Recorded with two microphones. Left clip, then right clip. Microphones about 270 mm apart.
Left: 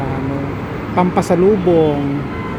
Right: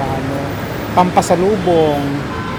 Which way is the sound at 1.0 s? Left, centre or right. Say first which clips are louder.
Right 3 dB; centre.